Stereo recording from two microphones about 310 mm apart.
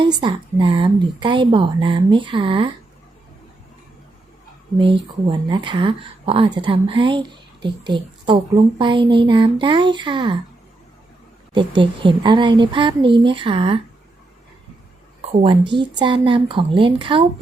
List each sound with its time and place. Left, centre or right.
0.0 s speech: centre
4.8 s speech: centre
11.5 s speech: centre
15.2 s speech: centre